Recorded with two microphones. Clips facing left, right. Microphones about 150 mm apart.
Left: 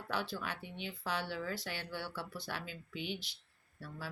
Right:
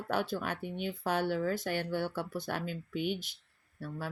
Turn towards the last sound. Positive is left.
turn(degrees=-50)  # may be behind; listen again after turning